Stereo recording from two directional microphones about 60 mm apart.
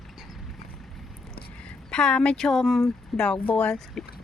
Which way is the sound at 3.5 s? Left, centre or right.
Centre.